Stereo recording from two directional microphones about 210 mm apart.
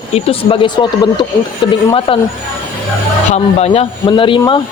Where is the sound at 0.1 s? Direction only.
25° left (ahead or behind).